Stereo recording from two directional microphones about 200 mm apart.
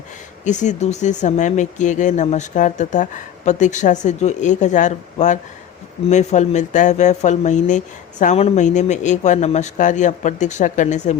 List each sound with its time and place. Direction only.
0.4 s speech: 35° left (ahead or behind)